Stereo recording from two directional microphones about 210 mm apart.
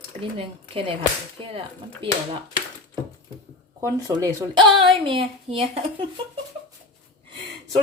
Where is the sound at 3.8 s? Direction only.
15° right (ahead or behind).